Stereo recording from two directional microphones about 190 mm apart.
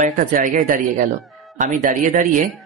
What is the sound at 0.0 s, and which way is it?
Speech, 45° right (ahead or behind).